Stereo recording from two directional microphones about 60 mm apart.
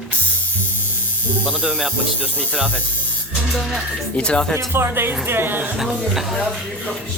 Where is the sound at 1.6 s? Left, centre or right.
Centre.